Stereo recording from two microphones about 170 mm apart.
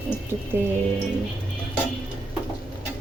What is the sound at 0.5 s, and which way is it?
Speech, 10° right (ahead or behind).